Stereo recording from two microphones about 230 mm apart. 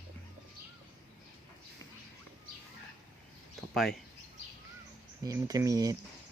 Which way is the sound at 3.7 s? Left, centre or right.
Centre.